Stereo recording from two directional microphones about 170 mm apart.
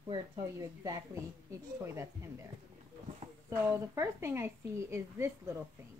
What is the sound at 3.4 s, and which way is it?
Speech, 15° right (ahead or behind).